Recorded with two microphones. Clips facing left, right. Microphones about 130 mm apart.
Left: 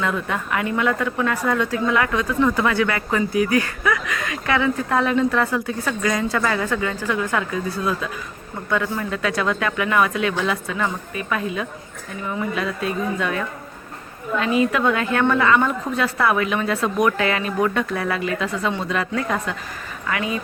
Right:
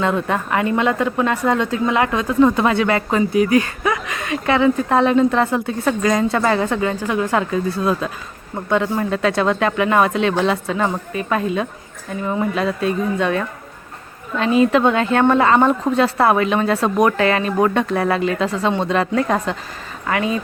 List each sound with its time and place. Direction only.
0.0 s a woman's voice: 30° right (ahead or behind)